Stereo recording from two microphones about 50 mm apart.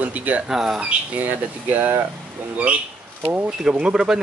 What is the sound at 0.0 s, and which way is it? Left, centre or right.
Speech, right.